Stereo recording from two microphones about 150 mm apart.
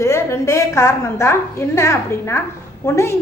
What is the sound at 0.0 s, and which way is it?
A woman's voice, 20° left (ahead or behind).